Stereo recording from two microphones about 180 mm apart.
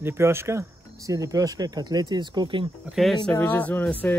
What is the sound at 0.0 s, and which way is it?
Speech, 15° right (ahead or behind).